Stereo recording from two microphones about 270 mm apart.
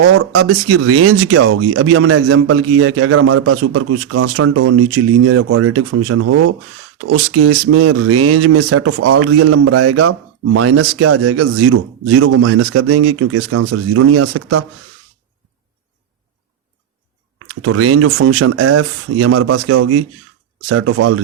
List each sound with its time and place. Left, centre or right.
0.0 s speech: right
17.4 s speech: right